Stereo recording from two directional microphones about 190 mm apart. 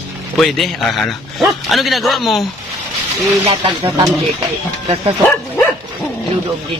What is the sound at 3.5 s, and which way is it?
Speech, 30° right (ahead or behind).